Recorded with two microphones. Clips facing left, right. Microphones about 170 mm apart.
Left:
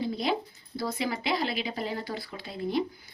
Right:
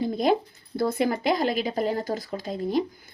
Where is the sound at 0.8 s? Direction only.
50° right (ahead or behind).